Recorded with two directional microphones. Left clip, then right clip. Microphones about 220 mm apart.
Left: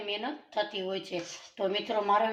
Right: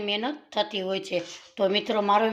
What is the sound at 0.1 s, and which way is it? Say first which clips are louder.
Speech: right 4 dB; 45° right (ahead or behind).